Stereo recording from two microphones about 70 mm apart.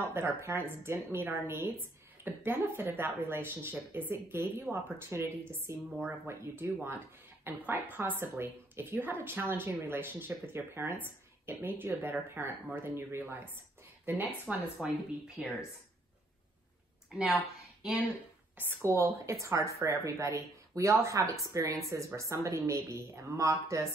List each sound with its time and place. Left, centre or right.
0.0 s a woman's voice: right
14.8 s speech: centre
17.8 s speech: centre
18.8 s speech: right